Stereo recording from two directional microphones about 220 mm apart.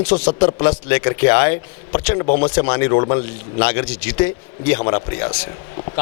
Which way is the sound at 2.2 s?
40° left (ahead or behind).